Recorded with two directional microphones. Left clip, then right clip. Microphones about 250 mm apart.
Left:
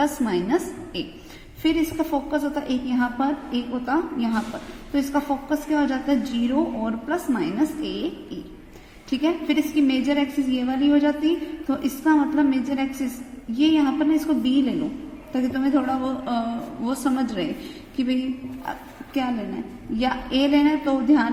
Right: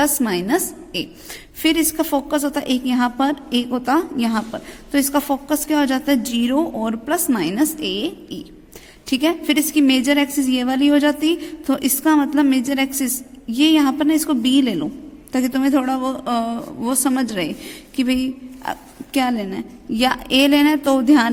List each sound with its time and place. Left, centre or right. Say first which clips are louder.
0.0 s a woman's voice: right 4 dB; right
19.9 s a woman's voice: right 7 dB; right